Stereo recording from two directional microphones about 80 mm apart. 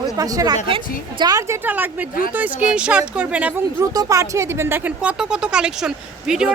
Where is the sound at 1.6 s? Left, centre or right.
Right.